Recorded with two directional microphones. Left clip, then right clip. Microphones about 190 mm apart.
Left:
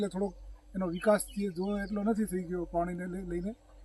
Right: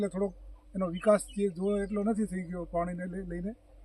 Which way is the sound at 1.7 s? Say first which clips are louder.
Right 2 dB; 25° right (ahead or behind).